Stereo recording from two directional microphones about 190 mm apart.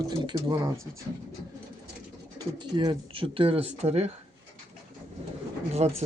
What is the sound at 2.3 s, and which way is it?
Speech, 20° right (ahead or behind).